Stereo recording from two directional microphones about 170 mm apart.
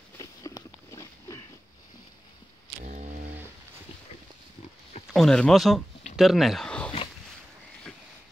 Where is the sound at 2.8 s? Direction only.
45° right (ahead or behind).